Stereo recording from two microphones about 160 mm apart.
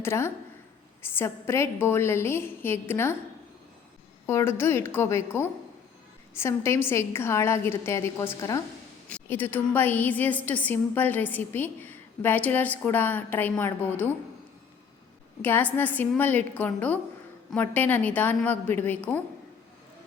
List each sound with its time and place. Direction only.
0.0 s a woman's voice: 15° left (ahead or behind)
4.3 s a woman's voice: 15° left (ahead or behind)
9.0 s a woman's voice: 10° left (ahead or behind)
15.4 s a woman's voice: 10° left (ahead or behind)